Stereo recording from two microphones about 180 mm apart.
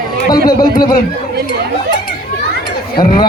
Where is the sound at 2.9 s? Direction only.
55° left (ahead or behind).